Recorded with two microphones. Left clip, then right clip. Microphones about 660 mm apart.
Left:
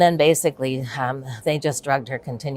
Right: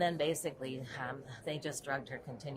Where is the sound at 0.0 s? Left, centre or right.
Left.